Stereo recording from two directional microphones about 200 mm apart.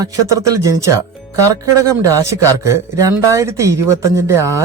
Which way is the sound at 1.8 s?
15° right (ahead or behind).